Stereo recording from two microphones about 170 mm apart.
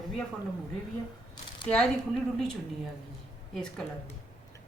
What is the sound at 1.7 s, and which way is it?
Speech, 5° left (ahead or behind).